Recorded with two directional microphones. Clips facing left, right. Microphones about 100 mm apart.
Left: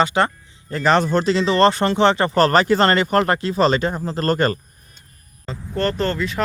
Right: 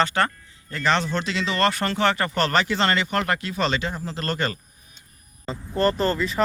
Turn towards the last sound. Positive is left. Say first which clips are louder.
# left 1 dB
turn(degrees=0)  # may be behind; listen again after turning